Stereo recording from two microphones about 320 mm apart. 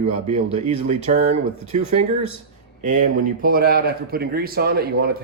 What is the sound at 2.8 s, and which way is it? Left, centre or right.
Speech, right.